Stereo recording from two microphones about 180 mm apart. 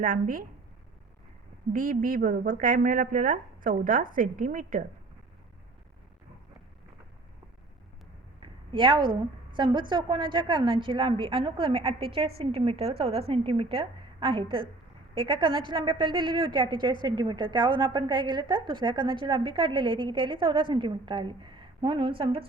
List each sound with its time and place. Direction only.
0.0 s a woman's voice: 50° right (ahead or behind)
1.7 s a woman's voice: 50° right (ahead or behind)
8.4 s a sound: 30° right (ahead or behind)
9.6 s a woman's voice: 25° right (ahead or behind)